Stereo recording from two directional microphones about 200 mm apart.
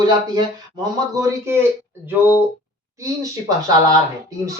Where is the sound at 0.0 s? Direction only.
20° right (ahead or behind).